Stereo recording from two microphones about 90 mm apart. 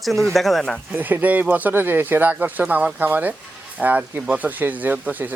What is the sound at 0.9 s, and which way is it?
Speech, 20° right (ahead or behind).